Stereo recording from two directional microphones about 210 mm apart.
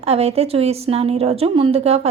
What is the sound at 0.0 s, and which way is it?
A woman's voice, 30° right (ahead or behind).